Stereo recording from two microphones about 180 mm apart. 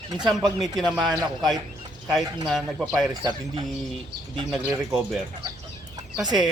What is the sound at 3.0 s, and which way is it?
Speech, 20° right (ahead or behind).